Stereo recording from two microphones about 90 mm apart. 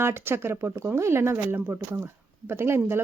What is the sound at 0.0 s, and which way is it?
Speech, 25° right (ahead or behind).